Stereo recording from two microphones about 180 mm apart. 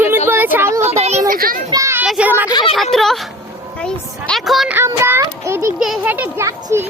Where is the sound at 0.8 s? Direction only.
35° right (ahead or behind).